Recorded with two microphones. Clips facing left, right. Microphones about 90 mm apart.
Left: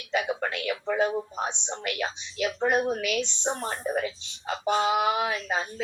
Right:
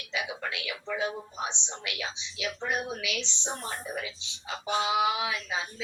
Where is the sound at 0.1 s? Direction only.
50° left (ahead or behind).